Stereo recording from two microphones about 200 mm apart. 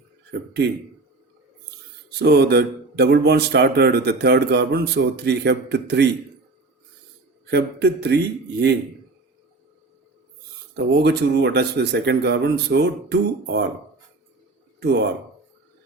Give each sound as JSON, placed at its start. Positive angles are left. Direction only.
{"t": 0.3, "sound": "a man's voice", "side_deg": -55}
{"t": 2.1, "sound": "speech", "side_deg": -55}
{"t": 7.4, "sound": "speech", "side_deg": -55}
{"t": 10.9, "sound": "speech", "side_deg": -55}
{"t": 14.8, "sound": "speech", "side_deg": -55}